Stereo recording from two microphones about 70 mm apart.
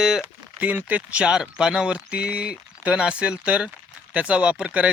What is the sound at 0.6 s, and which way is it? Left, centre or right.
Speech, right.